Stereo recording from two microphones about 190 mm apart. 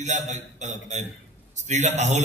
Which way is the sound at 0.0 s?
40° right (ahead or behind).